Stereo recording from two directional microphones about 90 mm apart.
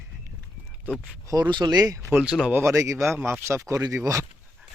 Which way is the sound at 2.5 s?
35° right (ahead or behind).